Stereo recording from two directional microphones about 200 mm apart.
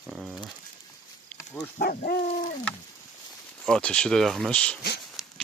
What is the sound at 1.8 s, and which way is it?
Speech, 50° left (ahead or behind).